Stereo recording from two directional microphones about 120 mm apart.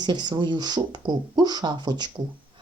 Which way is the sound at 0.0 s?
40° right (ahead or behind).